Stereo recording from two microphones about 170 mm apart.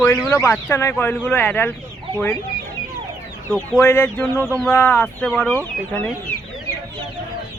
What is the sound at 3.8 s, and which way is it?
Speech, 10° left (ahead or behind).